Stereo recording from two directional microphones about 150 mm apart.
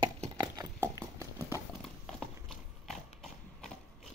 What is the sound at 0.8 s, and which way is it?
Clip-clop, 20° right (ahead or behind).